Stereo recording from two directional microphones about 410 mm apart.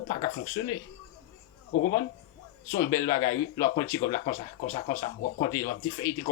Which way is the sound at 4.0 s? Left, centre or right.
Left.